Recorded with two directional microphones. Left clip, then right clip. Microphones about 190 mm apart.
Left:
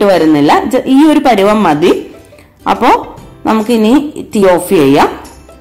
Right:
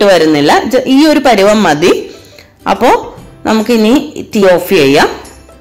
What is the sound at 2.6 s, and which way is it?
A woman's voice, 20° right (ahead or behind).